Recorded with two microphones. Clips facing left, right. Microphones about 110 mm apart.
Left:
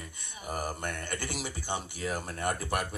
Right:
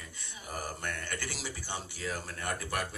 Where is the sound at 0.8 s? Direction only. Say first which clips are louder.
Left 2 dB; 20° left (ahead or behind).